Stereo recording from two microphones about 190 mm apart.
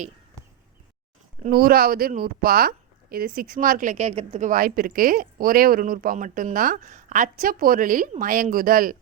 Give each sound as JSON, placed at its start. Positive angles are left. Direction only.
{"t": 1.5, "sound": "speech", "side_deg": -50}